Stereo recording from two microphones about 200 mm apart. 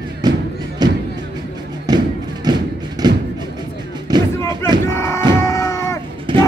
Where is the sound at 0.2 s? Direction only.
20° right (ahead or behind).